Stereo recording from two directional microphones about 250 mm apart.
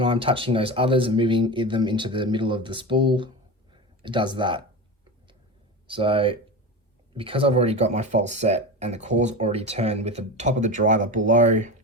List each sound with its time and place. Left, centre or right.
0.0 s speech: right
3.7 s a sound: centre
5.9 s speech: right